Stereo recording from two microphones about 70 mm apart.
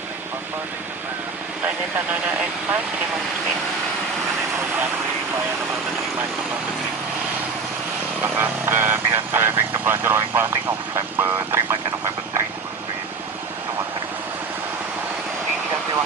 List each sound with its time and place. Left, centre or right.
8.2 s speech: right